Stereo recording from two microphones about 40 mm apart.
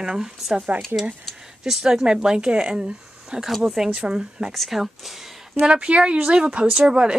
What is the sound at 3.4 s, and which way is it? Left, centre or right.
Speech, centre.